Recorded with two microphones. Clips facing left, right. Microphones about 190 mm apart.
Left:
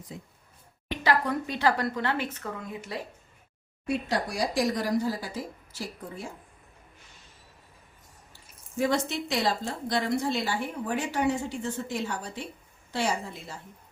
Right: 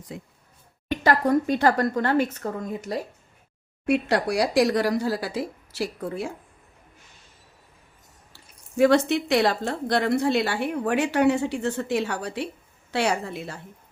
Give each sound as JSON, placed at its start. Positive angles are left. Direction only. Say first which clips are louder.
{"t": 0.1, "sound": "speech", "louder": "right 5 dB", "side_deg": -70}
{"t": 0.9, "sound": "speech", "louder": "right 5 dB", "side_deg": -45}
{"t": 3.8, "sound": "speech", "louder": "right 7 dB", "side_deg": -70}
{"t": 8.3, "sound": "speech", "louder": "right 8 dB", "side_deg": -75}